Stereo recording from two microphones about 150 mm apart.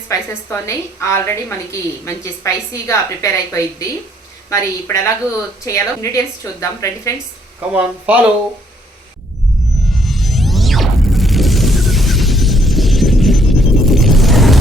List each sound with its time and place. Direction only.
0.1 s a woman's voice: 20° left (ahead or behind)
7.7 s speech: 10° right (ahead or behind)
9.9 s a sound: centre (ahead or behind)